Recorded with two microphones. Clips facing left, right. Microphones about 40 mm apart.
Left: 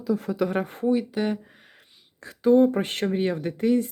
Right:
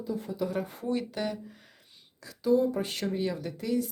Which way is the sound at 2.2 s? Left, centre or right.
Left.